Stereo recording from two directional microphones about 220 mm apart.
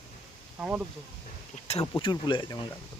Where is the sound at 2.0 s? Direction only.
20° left (ahead or behind).